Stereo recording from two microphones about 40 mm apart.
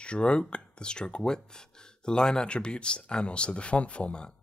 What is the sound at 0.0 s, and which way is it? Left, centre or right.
Speech, left.